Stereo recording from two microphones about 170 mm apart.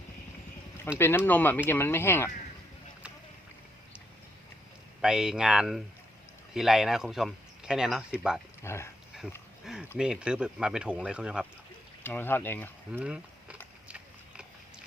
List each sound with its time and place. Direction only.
0.9 s speech: 15° left (ahead or behind)
4.9 s speech: 5° right (ahead or behind)
8.6 s speech: 15° left (ahead or behind)
9.7 s a sound: 5° right (ahead or behind)
10.0 s speech: 5° right (ahead or behind)
12.0 s speech: 10° left (ahead or behind)
12.9 s speech: 5° right (ahead or behind)